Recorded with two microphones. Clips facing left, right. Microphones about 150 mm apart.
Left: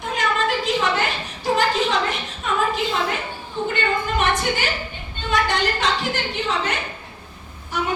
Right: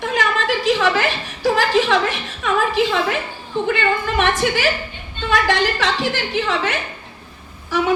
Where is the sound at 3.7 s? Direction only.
90° right.